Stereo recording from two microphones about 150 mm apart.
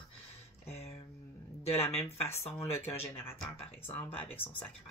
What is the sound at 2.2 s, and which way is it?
Speech, 15° left (ahead or behind).